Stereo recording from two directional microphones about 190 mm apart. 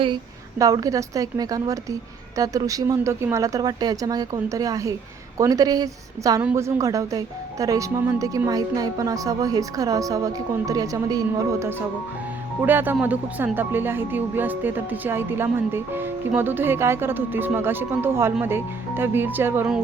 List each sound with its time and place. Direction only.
0.6 s speech: 20° right (ahead or behind)
12.6 s speech: 10° right (ahead or behind)